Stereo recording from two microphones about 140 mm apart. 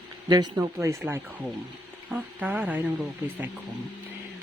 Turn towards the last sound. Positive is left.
turn(degrees=-10)  # may be behind; listen again after turning